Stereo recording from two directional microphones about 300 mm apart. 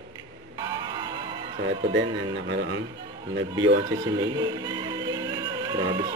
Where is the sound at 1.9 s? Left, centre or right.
Right.